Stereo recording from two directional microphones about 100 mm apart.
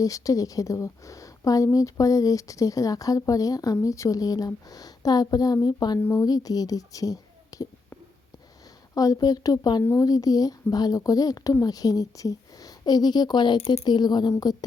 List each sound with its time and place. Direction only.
0.0 s speech: 35° left (ahead or behind)
6.0 s speech: 20° left (ahead or behind)
6.2 s speech: 40° left (ahead or behind)
9.0 s speech: 40° left (ahead or behind)